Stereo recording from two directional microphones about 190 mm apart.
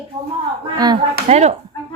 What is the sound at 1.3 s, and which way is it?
Chop, 35° right (ahead or behind).